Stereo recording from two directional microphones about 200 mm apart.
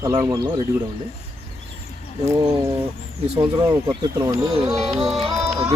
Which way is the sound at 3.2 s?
30° right (ahead or behind).